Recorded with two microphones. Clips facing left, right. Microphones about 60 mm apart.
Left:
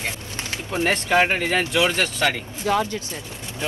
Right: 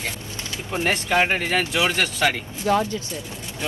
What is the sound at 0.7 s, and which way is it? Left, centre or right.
Speech, centre.